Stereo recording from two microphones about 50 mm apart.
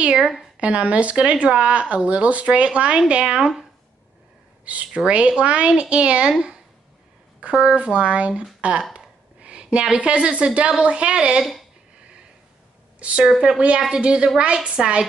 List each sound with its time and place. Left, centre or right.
0.2 s a woman's voice: centre
0.6 s a woman's voice: right
4.6 s speech: right
7.7 s speech: right
8.9 s a sound: right
10.8 s speech: right
13.0 s a woman's voice: right